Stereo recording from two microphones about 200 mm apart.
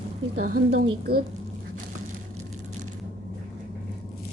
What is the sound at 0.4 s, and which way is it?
Speech, 50° right (ahead or behind).